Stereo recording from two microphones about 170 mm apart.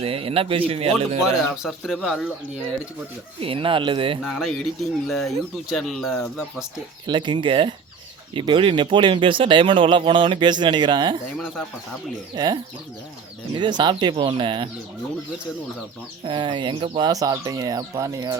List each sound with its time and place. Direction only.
0.0 s speech: 35° right (ahead or behind)
1.2 s speech: centre (ahead or behind)
3.4 s speech: 30° right (ahead or behind)
4.2 s speech: centre (ahead or behind)
7.1 s speech: 30° right (ahead or behind)
12.3 s speech: 25° right (ahead or behind)
13.6 s speech: 25° right (ahead or behind)
16.2 s speech: 30° right (ahead or behind)